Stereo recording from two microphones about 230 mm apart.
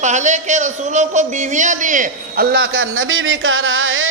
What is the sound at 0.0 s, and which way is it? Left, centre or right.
Speech, right.